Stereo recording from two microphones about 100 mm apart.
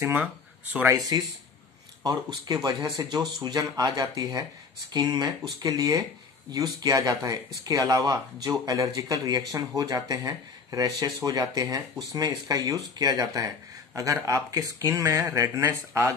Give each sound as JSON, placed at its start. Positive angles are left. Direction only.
{"t": 0.8, "sound": "speech", "side_deg": -35}